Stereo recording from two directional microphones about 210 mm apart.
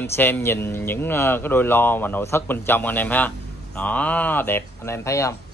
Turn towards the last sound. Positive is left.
turn(degrees=15)  # may be behind; listen again after turning